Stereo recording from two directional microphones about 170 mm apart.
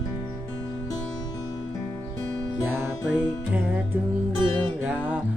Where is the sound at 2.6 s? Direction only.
10° right (ahead or behind).